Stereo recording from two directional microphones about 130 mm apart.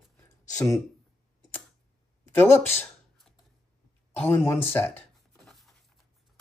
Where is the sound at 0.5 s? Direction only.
25° left (ahead or behind).